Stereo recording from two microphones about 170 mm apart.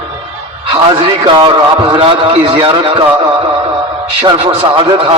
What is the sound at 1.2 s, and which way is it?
A man's voice, 30° right (ahead or behind).